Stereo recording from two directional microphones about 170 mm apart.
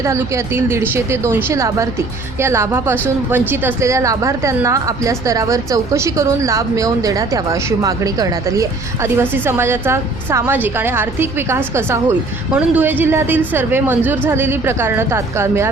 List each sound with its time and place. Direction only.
0.0 s a woman's voice: 15° right (ahead or behind)